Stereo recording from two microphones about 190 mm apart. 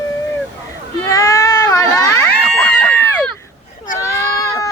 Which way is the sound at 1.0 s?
15° left (ahead or behind).